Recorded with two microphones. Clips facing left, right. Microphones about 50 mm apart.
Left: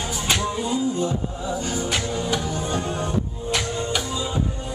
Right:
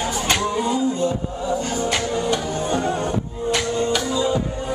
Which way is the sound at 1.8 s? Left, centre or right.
Centre.